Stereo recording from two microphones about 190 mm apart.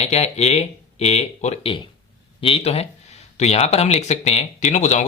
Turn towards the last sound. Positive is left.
turn(degrees=40)  # may be behind; listen again after turning